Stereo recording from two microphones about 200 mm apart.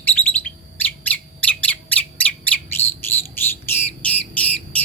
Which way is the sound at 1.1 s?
5° left (ahead or behind).